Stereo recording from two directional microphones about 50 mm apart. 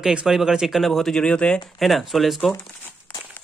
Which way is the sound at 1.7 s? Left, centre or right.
Centre.